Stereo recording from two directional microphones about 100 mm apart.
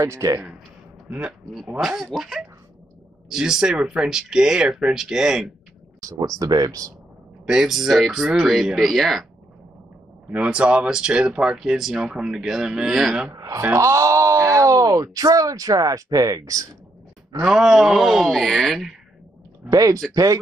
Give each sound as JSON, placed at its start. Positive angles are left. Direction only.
{"t": 0.0, "sound": "speech", "side_deg": -30}
{"t": 1.8, "sound": "speech", "side_deg": 0}
{"t": 5.9, "sound": "speech", "side_deg": -35}
{"t": 7.4, "sound": "speech", "side_deg": -5}
{"t": 10.3, "sound": "speech", "side_deg": -15}
{"t": 13.3, "sound": "speech", "side_deg": -30}
{"t": 17.5, "sound": "speech", "side_deg": -5}
{"t": 19.7, "sound": "speech", "side_deg": -35}